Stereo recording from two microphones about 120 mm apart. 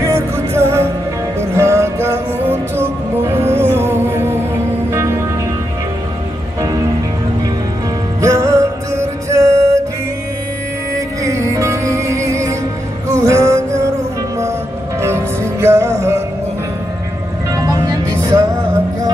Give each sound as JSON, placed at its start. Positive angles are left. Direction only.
{"t": 0.0, "sound": "music", "side_deg": -20}
{"t": 8.2, "sound": "music", "side_deg": -25}
{"t": 11.2, "sound": "music", "side_deg": -25}
{"t": 15.0, "sound": "music", "side_deg": -20}